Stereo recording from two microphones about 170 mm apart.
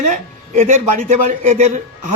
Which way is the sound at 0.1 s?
50° right (ahead or behind).